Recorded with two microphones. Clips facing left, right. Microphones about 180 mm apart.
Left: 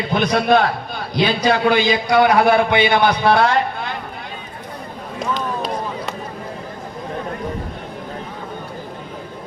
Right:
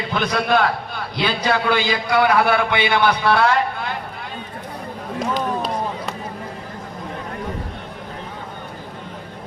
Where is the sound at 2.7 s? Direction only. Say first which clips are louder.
Left 4 dB; 20° left (ahead or behind).